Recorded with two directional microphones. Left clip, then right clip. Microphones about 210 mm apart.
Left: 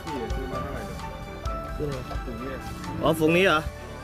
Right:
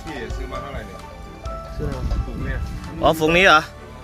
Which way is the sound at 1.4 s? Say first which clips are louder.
Right 1 dB; centre (ahead or behind).